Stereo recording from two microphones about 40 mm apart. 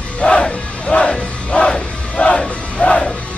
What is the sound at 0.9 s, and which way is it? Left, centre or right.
Music, left.